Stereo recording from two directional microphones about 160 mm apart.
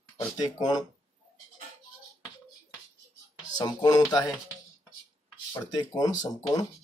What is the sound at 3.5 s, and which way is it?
Speech, 25° left (ahead or behind).